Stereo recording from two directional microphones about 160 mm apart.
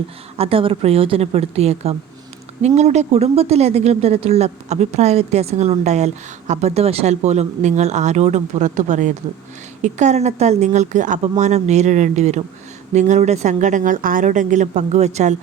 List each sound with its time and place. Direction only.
0.3 s speech: 35° right (ahead or behind)